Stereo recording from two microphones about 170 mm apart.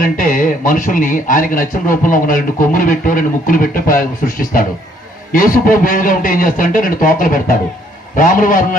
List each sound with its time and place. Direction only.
0.0 s a man's voice: 55° left (ahead or behind)